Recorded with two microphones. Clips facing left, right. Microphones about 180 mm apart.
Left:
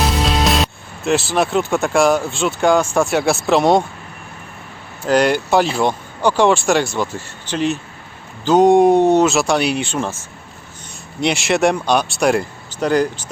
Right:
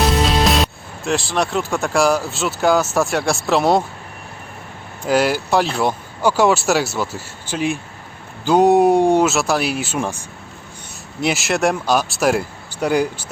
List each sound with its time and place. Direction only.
0.0 s speech: centre (ahead or behind)
5.0 s speech: 5° right (ahead or behind)
11.2 s speech: centre (ahead or behind)